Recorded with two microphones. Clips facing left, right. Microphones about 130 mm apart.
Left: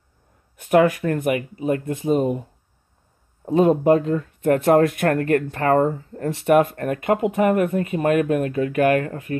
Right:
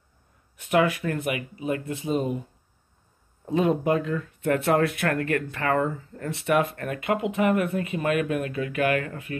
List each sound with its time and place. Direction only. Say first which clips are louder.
0.6 s speech: left 6 dB; 45° left (ahead or behind)
3.4 s speech: left 7 dB; 40° left (ahead or behind)